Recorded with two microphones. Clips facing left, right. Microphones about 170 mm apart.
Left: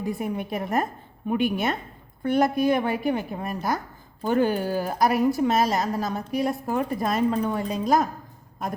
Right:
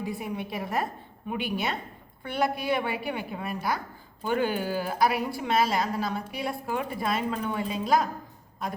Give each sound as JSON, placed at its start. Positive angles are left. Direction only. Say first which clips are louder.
{"t": 0.0, "sound": "a woman's voice", "louder": "left 4 dB", "side_deg": 50}